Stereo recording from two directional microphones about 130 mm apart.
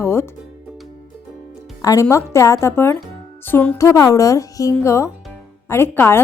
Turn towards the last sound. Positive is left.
turn(degrees=15)  # may be behind; listen again after turning